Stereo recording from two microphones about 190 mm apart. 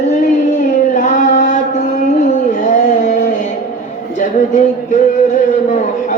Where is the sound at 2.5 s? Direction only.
40° left (ahead or behind).